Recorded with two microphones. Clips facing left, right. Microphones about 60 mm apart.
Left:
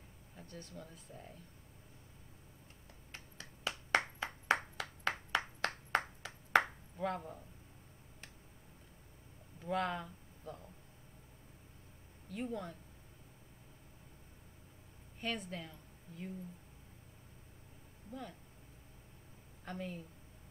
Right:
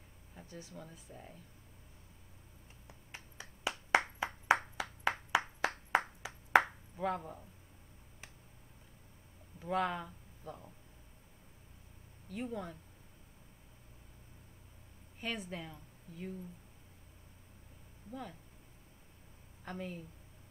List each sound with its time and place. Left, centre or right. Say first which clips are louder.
0.4 s speech: right 1 dB; centre
2.9 s finger snapping: right 2 dB; centre
4.0 s clapping: right 3 dB; centre
9.6 s speech: right 2 dB; centre
12.3 s speech: even; centre
15.1 s speech: even; centre
19.6 s a woman's voice: right 1 dB; centre